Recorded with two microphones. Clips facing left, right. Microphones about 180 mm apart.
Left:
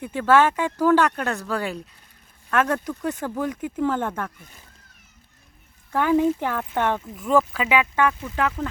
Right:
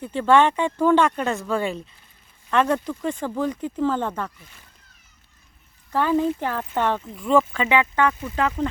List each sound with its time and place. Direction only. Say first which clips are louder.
0.0 s speech: right 1 dB; 10° left (ahead or behind)
5.9 s speech: left 1 dB; 15° left (ahead or behind)
8.4 s speech: right 5 dB; 15° right (ahead or behind)